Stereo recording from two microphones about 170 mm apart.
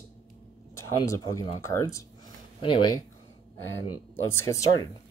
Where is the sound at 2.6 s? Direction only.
30° left (ahead or behind).